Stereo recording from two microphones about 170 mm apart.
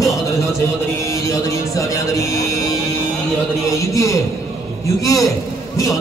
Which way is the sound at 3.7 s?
20° left (ahead or behind).